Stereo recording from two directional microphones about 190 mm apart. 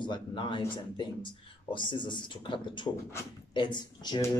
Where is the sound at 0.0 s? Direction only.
25° left (ahead or behind).